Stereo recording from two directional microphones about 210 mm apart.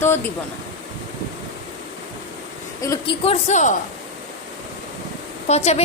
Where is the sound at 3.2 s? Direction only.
30° left (ahead or behind).